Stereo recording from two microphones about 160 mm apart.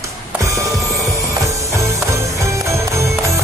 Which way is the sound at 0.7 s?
Centre (ahead or behind).